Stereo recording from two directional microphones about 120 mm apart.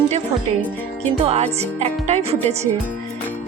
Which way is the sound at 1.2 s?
60° right (ahead or behind).